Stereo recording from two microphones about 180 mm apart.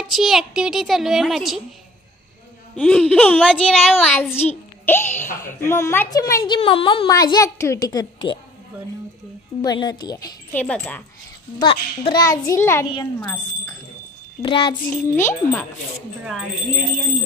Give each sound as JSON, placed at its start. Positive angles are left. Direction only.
{"t": 0.0, "sound": "a woman's voice", "side_deg": 0}
{"t": 2.7, "sound": "a woman's voice", "side_deg": 5}
{"t": 4.2, "sound": "a child's voice", "side_deg": 10}
{"t": 7.1, "sound": "a woman's voice", "side_deg": 20}
{"t": 9.6, "sound": "a woman's voice", "side_deg": 20}
{"t": 10.5, "sound": "a child's voice", "side_deg": 10}
{"t": 11.6, "sound": "a woman's voice", "side_deg": 30}
{"t": 14.4, "sound": "a woman's voice", "side_deg": 25}
{"t": 14.9, "sound": "a child's voice", "side_deg": 10}